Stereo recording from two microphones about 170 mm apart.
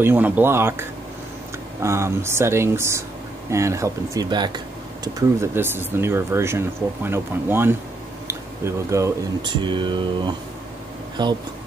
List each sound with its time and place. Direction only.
0.0 s speech: 15° right (ahead or behind)
5.0 s speech: 15° right (ahead or behind)